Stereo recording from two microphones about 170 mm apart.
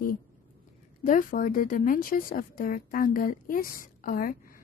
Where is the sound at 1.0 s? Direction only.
55° left (ahead or behind).